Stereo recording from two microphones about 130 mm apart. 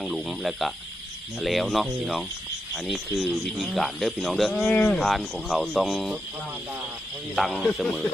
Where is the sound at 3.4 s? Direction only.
Centre (ahead or behind).